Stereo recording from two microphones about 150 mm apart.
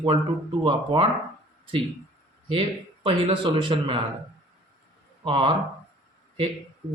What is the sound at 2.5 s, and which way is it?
Speech, 35° right (ahead or behind).